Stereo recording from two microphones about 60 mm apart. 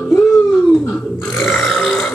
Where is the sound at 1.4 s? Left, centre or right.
Centre.